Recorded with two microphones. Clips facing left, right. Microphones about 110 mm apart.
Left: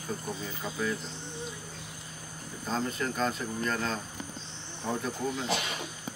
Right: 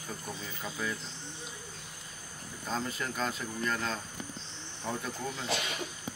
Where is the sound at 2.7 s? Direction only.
Centre (ahead or behind).